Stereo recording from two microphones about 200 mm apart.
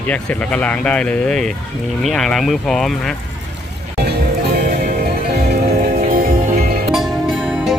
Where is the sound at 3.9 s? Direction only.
55° right (ahead or behind).